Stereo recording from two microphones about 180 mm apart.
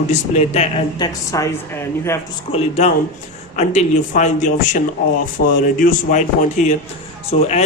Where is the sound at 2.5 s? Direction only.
40° left (ahead or behind).